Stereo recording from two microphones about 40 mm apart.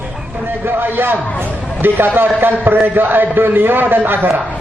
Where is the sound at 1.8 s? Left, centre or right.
Right.